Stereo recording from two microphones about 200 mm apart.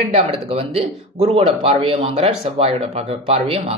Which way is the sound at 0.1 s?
30° right (ahead or behind).